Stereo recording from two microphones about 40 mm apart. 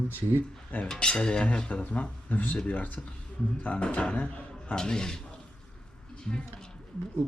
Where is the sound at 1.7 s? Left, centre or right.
Left.